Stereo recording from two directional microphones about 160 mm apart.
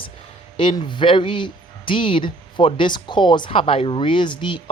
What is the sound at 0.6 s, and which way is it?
Speech, 30° left (ahead or behind).